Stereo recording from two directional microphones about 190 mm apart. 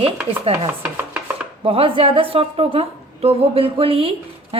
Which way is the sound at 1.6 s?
30° right (ahead or behind).